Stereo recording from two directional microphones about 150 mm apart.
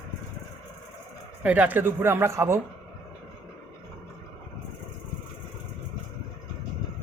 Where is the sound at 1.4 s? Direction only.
10° right (ahead or behind).